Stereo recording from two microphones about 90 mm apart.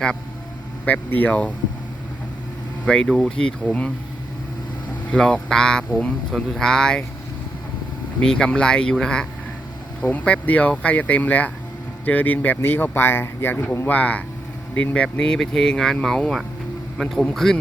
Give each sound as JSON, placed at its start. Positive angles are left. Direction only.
{"t": 0.9, "sound": "speech", "side_deg": 20}
{"t": 3.1, "sound": "speech", "side_deg": 5}
{"t": 5.1, "sound": "speech", "side_deg": 10}
{"t": 8.2, "sound": "a man's voice", "side_deg": 10}